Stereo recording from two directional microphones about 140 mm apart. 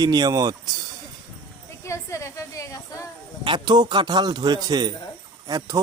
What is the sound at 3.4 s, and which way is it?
A man's voice, 35° right (ahead or behind).